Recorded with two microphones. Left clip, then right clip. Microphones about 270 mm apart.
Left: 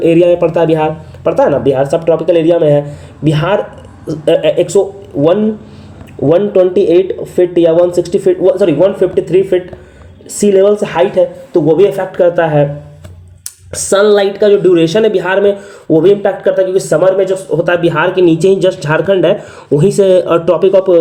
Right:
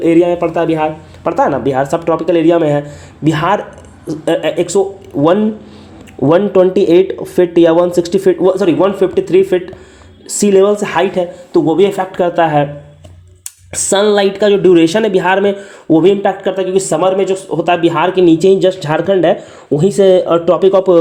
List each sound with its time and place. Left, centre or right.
0.0 s speech: centre
6.3 s speech: right
13.7 s speech: right